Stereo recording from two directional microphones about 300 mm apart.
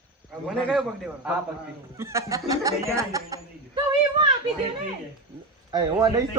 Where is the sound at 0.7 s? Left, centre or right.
Centre.